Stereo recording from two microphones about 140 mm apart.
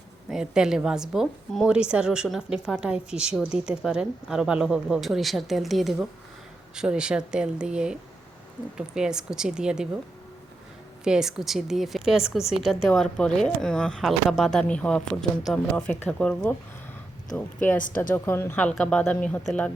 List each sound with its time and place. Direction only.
0.3 s a woman's voice: 5° right (ahead or behind)
9.0 s a woman's voice: 5° right (ahead or behind)
11.0 s a woman's voice: 5° right (ahead or behind)